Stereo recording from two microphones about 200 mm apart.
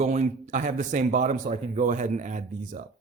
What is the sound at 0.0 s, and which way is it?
Speech, 35° right (ahead or behind).